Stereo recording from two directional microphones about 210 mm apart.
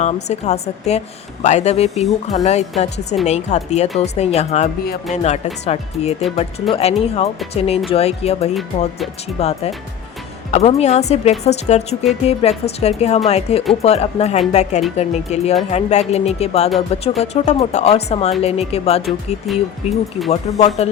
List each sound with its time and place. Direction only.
0.0 s a woman's voice: 30° left (ahead or behind)
19.5 s speech: centre (ahead or behind)
20.3 s a woman's voice: 30° left (ahead or behind)